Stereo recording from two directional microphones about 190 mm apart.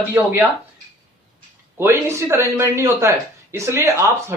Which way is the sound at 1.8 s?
15° right (ahead or behind).